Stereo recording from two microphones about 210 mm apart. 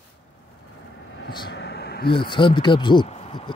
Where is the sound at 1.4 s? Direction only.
55° left (ahead or behind).